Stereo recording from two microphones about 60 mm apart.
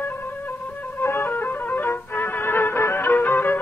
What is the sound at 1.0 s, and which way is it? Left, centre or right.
Music, left.